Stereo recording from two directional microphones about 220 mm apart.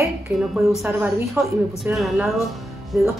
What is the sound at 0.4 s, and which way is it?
Speech, 5° right (ahead or behind).